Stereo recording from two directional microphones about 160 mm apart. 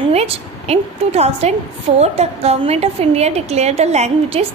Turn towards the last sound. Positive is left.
turn(degrees=-40)  # may be behind; listen again after turning